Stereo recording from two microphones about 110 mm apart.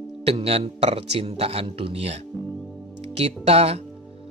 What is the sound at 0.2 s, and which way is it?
A man's voice, 65° right (ahead or behind).